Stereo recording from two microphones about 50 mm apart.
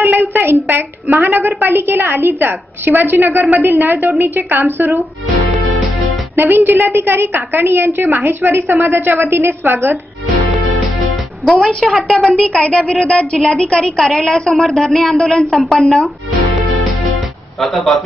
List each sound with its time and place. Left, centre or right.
0.0 s a sound: right
1.1 s a woman's voice: right
6.3 s a woman's voice: right
11.4 s a woman's voice: centre
12.5 s speech: left
13.4 s a woman's voice: centre
13.7 s a woman's voice: centre